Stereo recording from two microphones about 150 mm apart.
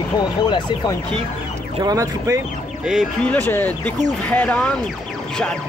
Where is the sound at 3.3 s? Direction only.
10° left (ahead or behind).